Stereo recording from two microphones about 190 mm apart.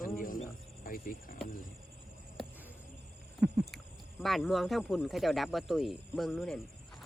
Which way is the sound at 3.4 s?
5° right (ahead or behind).